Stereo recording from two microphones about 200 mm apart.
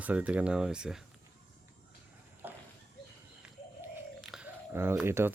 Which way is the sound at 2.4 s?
10° right (ahead or behind).